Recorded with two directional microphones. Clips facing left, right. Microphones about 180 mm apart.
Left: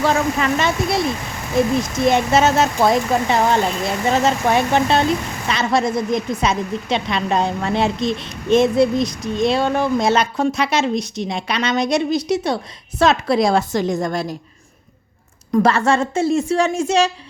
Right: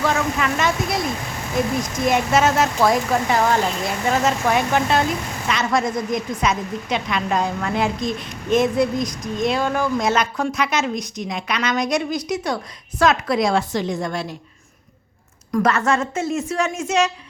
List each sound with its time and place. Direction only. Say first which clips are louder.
0.0 s speech: left 3 dB; 30° left (ahead or behind)
2.0 s a woman's voice: left 2 dB; 30° left (ahead or behind)
15.5 s a woman's voice: left 3 dB; 30° left (ahead or behind)